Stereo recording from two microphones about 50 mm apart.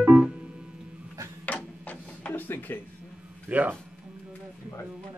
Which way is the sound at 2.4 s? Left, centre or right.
Left.